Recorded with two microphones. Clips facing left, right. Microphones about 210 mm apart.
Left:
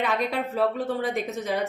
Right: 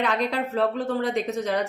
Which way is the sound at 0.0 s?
5° left (ahead or behind).